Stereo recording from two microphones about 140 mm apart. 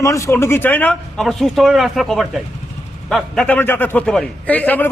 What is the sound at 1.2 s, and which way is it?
A man's voice, centre (ahead or behind).